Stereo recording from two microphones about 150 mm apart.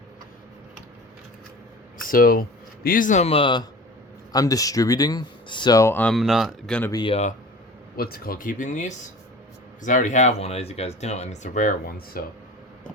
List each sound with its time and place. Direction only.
2.0 s speech: 75° left (ahead or behind); by 3.6 s 35° left (ahead or behind)
4.3 s speech: 25° left (ahead or behind)
6.1 s speech: centre (ahead or behind)
6.9 s speech: 35° left (ahead or behind)
7.9 s speech: 90° left